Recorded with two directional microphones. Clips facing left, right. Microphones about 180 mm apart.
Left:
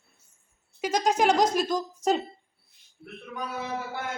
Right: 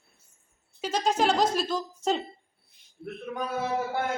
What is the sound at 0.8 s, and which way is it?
A woman's voice, 15° left (ahead or behind).